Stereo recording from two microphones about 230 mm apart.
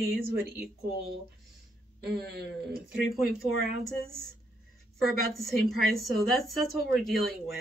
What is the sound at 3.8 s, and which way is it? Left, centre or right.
Speech, centre.